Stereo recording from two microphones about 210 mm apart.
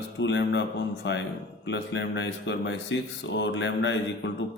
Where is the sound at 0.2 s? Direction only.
55° left (ahead or behind).